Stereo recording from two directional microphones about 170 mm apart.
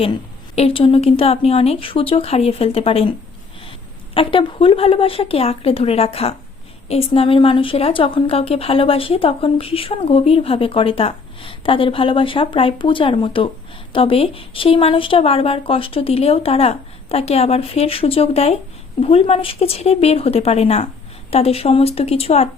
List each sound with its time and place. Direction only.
0.5 s speech: 35° left (ahead or behind)